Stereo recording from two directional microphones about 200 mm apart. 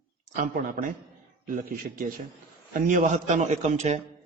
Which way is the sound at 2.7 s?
40° right (ahead or behind).